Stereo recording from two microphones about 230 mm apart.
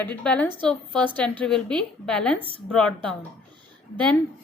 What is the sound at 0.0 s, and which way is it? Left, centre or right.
A woman's voice, centre.